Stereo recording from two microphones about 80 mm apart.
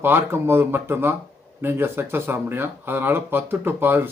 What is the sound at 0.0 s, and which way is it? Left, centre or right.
Speech, right.